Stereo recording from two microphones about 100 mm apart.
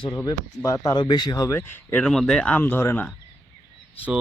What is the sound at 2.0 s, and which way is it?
Speech, 5° left (ahead or behind).